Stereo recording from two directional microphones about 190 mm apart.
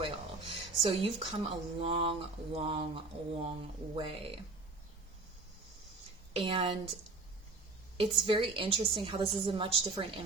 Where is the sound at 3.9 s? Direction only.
30° right (ahead or behind).